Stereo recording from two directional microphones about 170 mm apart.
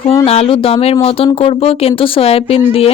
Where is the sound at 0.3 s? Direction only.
35° left (ahead or behind).